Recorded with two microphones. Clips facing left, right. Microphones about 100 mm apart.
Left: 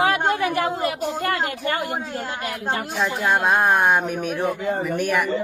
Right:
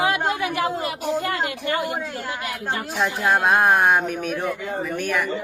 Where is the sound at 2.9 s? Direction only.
Centre (ahead or behind).